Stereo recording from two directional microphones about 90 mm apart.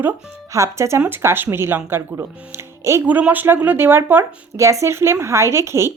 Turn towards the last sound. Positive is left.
turn(degrees=-30)  # may be behind; listen again after turning